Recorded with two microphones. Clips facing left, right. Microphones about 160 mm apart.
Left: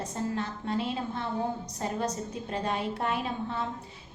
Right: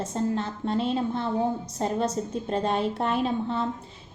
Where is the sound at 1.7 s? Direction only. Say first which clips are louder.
Right 5 dB; 25° right (ahead or behind).